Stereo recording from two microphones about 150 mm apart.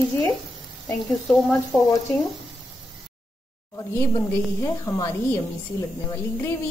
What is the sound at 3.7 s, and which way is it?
Speech, 20° left (ahead or behind).